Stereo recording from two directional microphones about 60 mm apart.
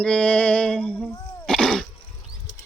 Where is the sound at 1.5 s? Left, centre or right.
Centre.